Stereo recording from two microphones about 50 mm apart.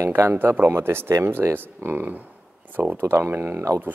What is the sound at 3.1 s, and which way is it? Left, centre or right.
Speech, right.